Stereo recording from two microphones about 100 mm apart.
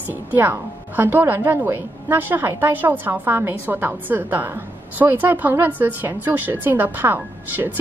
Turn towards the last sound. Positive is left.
turn(degrees=-20)  # may be behind; listen again after turning